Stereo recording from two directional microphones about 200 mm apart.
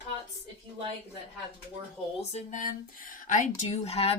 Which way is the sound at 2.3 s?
40° left (ahead or behind).